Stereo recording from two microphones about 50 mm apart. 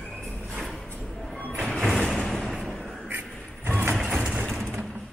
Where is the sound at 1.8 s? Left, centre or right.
Centre.